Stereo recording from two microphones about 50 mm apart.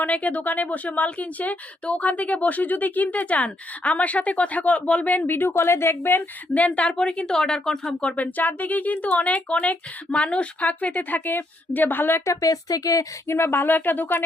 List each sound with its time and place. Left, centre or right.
0.0 s speech: left
5.5 s speech: left
6.5 s speech: left
8.1 s speech: left
13.2 s speech: left